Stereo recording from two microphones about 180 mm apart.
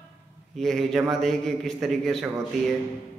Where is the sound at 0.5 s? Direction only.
Centre (ahead or behind).